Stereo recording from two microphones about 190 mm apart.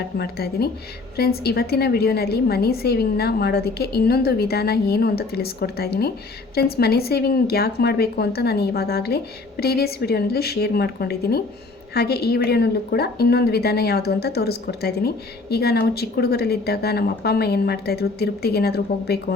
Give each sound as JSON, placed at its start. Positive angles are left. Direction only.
{"t": 0.2, "sound": "a woman's voice", "side_deg": 55}